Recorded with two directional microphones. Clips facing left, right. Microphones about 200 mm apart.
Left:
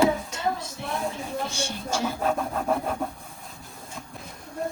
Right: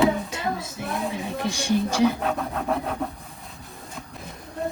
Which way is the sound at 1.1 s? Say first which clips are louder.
Right 3 dB; 15° right (ahead or behind).